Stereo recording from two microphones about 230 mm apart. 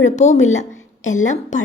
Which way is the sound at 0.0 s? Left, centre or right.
Left.